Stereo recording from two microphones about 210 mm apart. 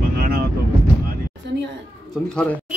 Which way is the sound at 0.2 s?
45° right (ahead or behind).